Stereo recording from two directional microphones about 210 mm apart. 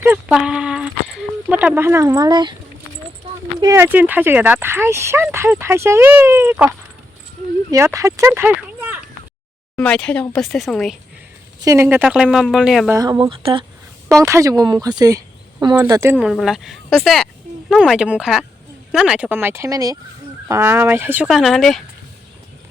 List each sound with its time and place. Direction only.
0.0 s a sound: 5° right (ahead or behind)
3.6 s speech: 15° right (ahead or behind)
7.7 s speech: 15° right (ahead or behind)
9.7 s speech: 5° left (ahead or behind)
11.6 s speech: 15° right (ahead or behind)
12.9 s speech: 15° right (ahead or behind)
14.2 s speech: 15° right (ahead or behind)